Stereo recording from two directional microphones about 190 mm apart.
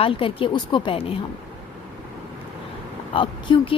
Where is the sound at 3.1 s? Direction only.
25° left (ahead or behind).